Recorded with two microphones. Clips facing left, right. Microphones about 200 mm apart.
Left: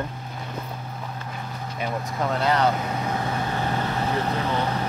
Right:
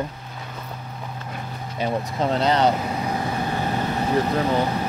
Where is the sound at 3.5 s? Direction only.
15° right (ahead or behind).